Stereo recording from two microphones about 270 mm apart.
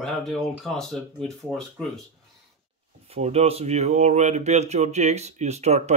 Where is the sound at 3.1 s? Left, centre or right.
Right.